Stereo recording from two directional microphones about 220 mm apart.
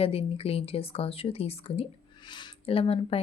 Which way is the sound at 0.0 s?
25° left (ahead or behind).